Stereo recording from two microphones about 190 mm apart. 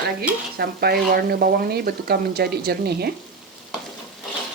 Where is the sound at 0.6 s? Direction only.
55° right (ahead or behind).